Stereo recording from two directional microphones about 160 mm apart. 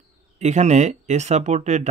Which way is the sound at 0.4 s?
45° right (ahead or behind).